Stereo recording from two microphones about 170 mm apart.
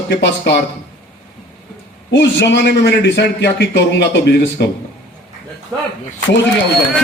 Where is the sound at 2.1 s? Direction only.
90° left.